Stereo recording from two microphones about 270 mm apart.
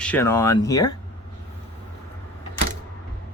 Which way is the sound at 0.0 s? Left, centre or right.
Centre.